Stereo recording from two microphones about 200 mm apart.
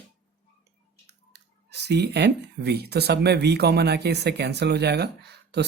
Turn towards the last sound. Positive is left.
turn(degrees=-55)  # may be behind; listen again after turning